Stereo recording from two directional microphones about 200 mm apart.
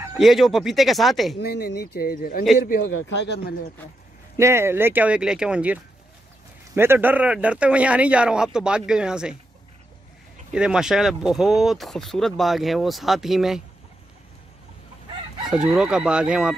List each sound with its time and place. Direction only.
0.2 s speech: centre (ahead or behind)
1.4 s speech: 50° left (ahead or behind)
3.0 s speech: 60° left (ahead or behind)
4.4 s speech: 15° right (ahead or behind)
10.5 s speech: 5° right (ahead or behind)
15.4 s speech: 5° right (ahead or behind)